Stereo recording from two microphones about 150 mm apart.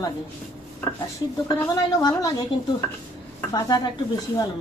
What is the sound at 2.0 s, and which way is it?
Speech, 25° left (ahead or behind).